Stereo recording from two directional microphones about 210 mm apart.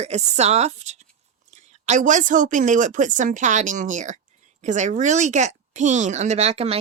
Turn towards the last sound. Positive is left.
turn(degrees=-30)  # may be behind; listen again after turning